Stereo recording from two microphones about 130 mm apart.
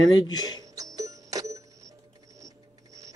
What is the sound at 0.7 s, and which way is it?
Music, 25° right (ahead or behind).